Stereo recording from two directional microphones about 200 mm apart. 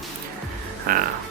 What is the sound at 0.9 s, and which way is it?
Speech, 45° right (ahead or behind).